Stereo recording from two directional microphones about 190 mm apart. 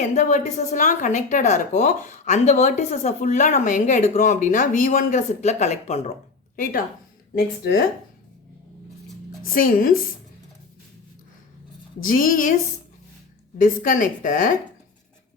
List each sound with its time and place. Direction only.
0.0 s a woman's voice: 40° left (ahead or behind)
9.4 s speech: 45° left (ahead or behind)
12.0 s speech: 45° left (ahead or behind)
13.6 s speech: 45° left (ahead or behind)